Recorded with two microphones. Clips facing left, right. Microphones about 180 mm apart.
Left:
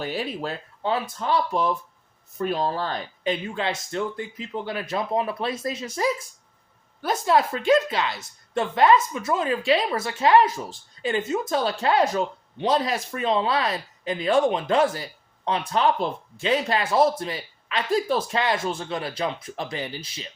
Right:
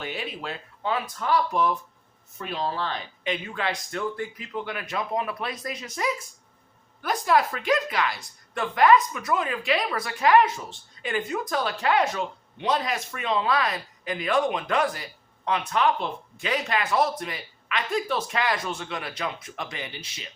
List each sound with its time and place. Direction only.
0.0 s a woman's voice: 35° left (ahead or behind)
2.4 s speech: 40° left (ahead or behind)
3.5 s a woman's voice: 25° left (ahead or behind)